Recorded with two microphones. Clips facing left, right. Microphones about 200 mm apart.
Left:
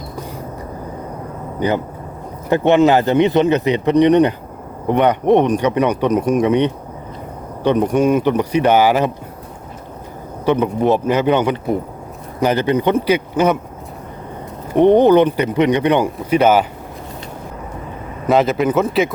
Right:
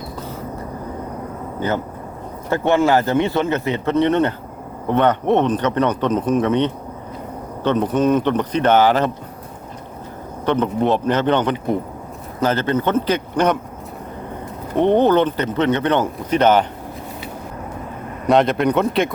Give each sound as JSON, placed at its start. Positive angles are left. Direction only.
{"t": 1.5, "sound": "speech", "side_deg": 15}
{"t": 10.4, "sound": "speech", "side_deg": 10}
{"t": 14.8, "sound": "speech", "side_deg": 15}
{"t": 18.3, "sound": "speech", "side_deg": 0}